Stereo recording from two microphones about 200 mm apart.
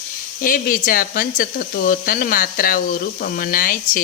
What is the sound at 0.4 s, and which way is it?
Speech, 45° left (ahead or behind).